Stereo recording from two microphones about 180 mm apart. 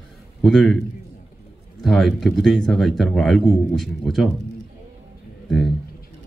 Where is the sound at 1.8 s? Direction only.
Centre (ahead or behind).